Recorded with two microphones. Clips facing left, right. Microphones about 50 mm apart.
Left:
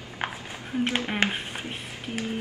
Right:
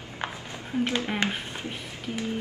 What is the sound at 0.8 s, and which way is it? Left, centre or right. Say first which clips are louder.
Speech: left 1 dB; left.